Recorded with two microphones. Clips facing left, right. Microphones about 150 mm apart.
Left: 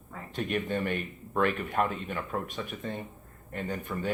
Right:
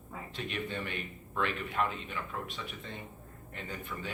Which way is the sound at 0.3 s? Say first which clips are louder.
Left 8 dB; 45° left (ahead or behind).